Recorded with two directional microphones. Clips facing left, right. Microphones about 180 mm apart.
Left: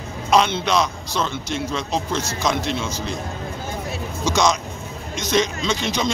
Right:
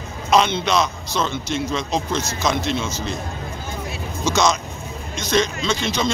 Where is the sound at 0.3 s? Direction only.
10° left (ahead or behind).